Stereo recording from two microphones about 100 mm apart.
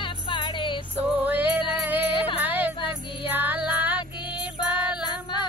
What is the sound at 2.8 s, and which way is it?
Music, 60° left (ahead or behind).